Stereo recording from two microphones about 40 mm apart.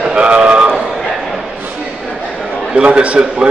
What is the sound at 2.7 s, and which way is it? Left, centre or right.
Speech, right.